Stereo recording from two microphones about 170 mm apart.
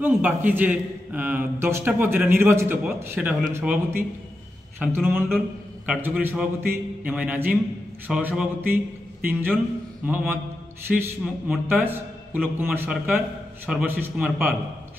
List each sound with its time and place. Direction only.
0.0 s a man's voice: 10° right (ahead or behind)
4.7 s a man's voice: 10° right (ahead or behind)